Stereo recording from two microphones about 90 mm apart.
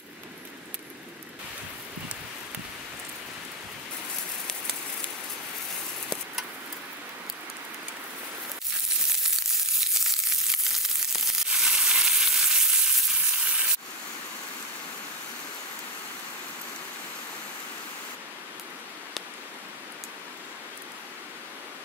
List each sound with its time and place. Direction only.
9.5 s frying: 5° right (ahead or behind)